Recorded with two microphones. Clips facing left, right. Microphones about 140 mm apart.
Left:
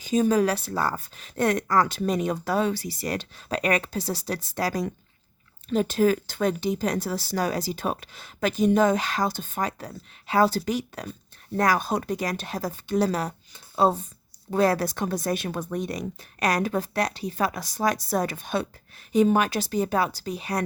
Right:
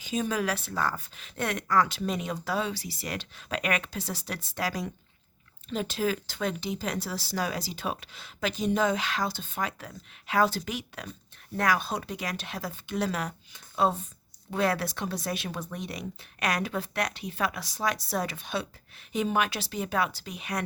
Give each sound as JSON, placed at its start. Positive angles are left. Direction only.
{"t": 0.0, "sound": "speech", "side_deg": 40}